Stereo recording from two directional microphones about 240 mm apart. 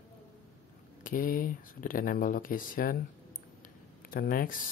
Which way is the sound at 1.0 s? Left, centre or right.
Left.